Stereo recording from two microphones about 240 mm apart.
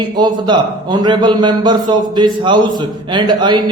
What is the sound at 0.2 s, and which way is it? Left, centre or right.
A man's voice, centre.